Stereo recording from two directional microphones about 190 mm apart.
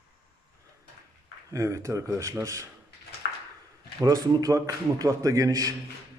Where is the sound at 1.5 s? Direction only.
15° right (ahead or behind).